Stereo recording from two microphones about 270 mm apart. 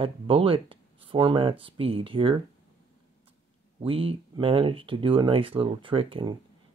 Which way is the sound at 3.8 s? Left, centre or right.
Right.